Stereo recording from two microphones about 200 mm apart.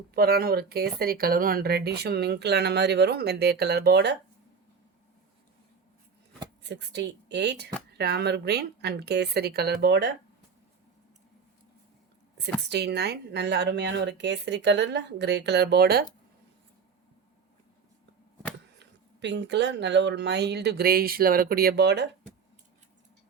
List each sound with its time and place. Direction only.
0.1 s speech: 50° right (ahead or behind)
6.6 s speech: 60° right (ahead or behind)
12.6 s speech: 55° right (ahead or behind)
18.8 s speech: 60° right (ahead or behind)